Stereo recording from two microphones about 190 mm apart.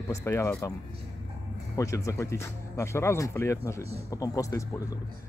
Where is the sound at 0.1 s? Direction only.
15° left (ahead or behind).